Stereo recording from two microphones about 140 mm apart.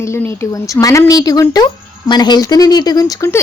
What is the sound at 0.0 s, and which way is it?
Speech, 20° left (ahead or behind).